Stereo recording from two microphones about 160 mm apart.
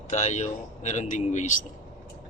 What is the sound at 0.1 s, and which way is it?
A man's voice, 45° left (ahead or behind).